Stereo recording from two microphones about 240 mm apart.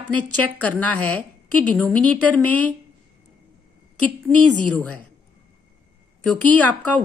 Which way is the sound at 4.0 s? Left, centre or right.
Right.